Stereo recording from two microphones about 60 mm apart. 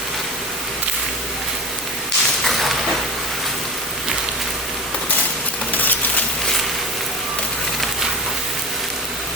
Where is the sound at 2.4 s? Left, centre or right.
Centre.